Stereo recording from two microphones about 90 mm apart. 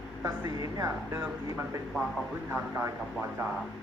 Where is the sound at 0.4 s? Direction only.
40° right (ahead or behind); by 3.4 s 25° right (ahead or behind).